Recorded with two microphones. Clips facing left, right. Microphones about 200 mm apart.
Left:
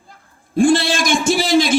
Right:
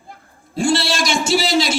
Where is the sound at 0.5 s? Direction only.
50° left (ahead or behind).